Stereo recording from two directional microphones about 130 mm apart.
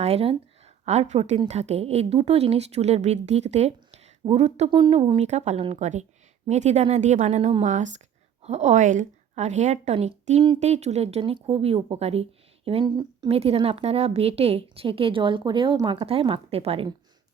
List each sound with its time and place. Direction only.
0.0 s a woman's voice: 50° right (ahead or behind)
4.7 s speech: 40° right (ahead or behind)
5.2 s a woman's voice: 60° right (ahead or behind); by 16.0 s 35° right (ahead or behind)
16.0 s a woman's voice: 45° right (ahead or behind)